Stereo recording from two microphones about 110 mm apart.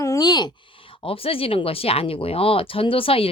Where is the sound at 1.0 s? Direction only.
55° left (ahead or behind).